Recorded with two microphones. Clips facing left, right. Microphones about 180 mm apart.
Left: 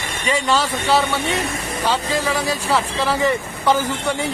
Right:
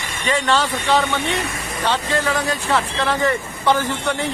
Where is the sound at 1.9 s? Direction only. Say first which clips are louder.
Even; 10° left (ahead or behind).